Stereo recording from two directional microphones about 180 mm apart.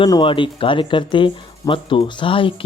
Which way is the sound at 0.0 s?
25° left (ahead or behind).